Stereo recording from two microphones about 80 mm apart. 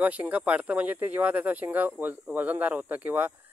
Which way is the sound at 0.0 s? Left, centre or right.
Centre.